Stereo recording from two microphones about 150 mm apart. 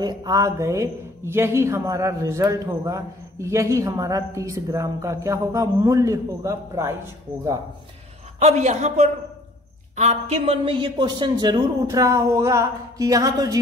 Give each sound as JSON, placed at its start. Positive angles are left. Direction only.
{"t": 0.0, "sound": "speech", "side_deg": -25}
{"t": 8.4, "sound": "a man's voice", "side_deg": -45}